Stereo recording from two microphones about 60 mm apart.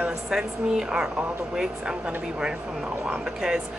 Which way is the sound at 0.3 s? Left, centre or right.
Centre.